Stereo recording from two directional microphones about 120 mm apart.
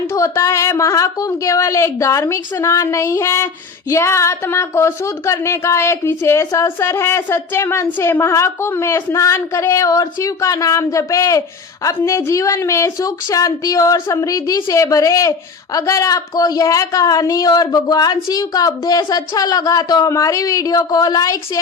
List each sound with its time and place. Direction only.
0.1 s a woman's voice: 25° left (ahead or behind)